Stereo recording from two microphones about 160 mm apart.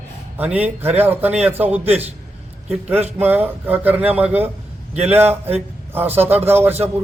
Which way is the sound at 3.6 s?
10° right (ahead or behind).